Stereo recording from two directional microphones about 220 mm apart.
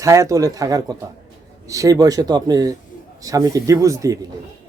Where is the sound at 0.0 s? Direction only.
15° right (ahead or behind).